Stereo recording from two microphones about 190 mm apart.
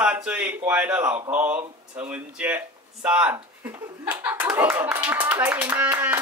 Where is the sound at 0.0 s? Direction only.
10° right (ahead or behind).